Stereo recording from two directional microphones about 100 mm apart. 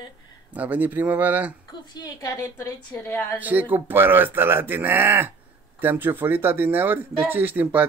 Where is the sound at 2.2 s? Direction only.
35° left (ahead or behind).